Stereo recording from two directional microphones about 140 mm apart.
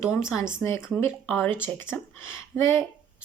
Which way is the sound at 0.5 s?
15° left (ahead or behind).